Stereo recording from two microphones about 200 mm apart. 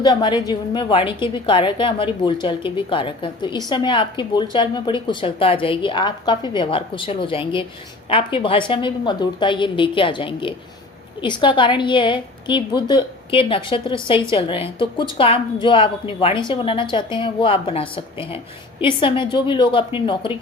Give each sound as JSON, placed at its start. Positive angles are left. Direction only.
{"t": 0.0, "sound": "a woman's voice", "side_deg": 20}